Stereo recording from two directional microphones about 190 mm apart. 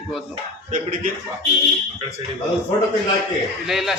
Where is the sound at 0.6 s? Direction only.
45° right (ahead or behind).